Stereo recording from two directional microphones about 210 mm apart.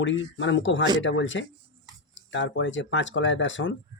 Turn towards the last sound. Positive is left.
turn(degrees=60)  # may be behind; listen again after turning